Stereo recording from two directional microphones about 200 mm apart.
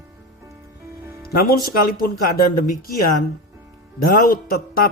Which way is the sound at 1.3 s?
50° left (ahead or behind).